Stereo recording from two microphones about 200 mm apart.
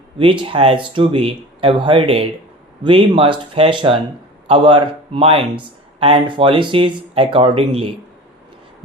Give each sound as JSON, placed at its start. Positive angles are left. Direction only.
{"t": 0.2, "sound": "speech", "side_deg": -25}